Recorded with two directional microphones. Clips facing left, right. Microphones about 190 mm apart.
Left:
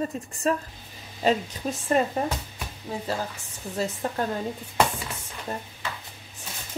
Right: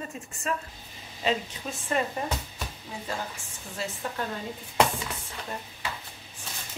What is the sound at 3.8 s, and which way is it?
Speech, 40° left (ahead or behind).